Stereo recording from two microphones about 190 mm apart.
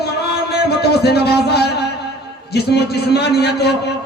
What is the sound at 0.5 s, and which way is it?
A man's voice, 60° left (ahead or behind).